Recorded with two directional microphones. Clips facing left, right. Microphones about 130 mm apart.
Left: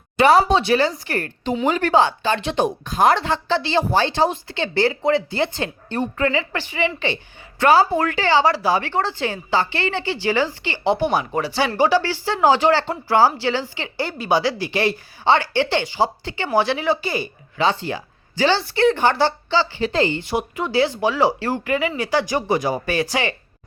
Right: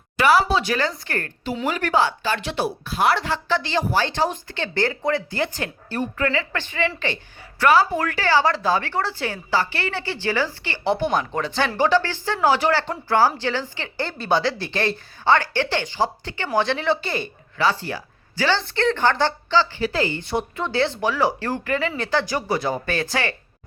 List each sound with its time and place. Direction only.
0.2 s a woman's voice: 30° left (ahead or behind)
2.9 s a woman's voice: 40° left (ahead or behind)
4.0 s speech: 15° left (ahead or behind)
7.6 s speech: 30° left (ahead or behind); by 17.2 s 5° left (ahead or behind)
17.6 s speech: 20° left (ahead or behind)